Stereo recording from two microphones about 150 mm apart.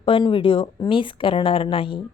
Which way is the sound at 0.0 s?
35° left (ahead or behind).